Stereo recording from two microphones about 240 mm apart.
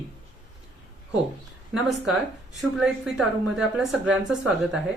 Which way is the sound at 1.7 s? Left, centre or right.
Centre.